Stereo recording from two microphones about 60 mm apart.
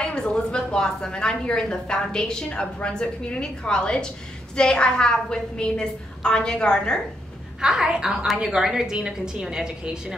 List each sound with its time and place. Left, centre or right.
0.0 s a woman's voice: centre
7.6 s a woman's voice: centre